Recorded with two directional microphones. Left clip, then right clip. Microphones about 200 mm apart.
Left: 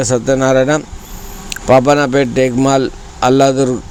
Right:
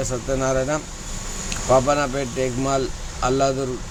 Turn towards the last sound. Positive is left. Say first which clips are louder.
# left 10 dB
turn(degrees=40)  # may be behind; listen again after turning